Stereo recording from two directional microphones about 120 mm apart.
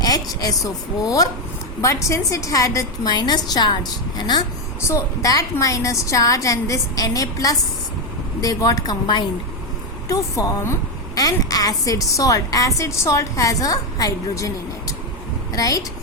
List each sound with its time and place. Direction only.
0.0 s a woman's voice: 30° left (ahead or behind)
4.8 s a woman's voice: 25° left (ahead or behind)
10.1 s a woman's voice: 25° left (ahead or behind)